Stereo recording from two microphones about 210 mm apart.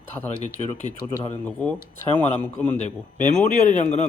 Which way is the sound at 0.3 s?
35° left (ahead or behind).